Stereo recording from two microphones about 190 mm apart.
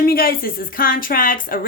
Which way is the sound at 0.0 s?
50° left (ahead or behind).